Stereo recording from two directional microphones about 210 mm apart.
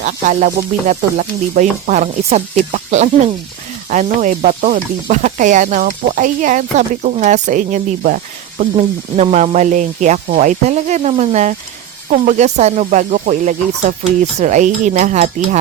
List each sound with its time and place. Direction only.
0.0 s speech: 35° right (ahead or behind)